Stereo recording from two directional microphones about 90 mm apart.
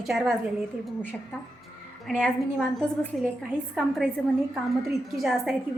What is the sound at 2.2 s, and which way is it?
A woman's voice, 5° left (ahead or behind).